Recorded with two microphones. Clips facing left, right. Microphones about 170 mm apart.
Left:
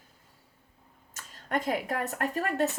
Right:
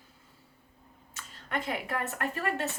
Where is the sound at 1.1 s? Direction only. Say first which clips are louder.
Left 4 dB; 40° left (ahead or behind).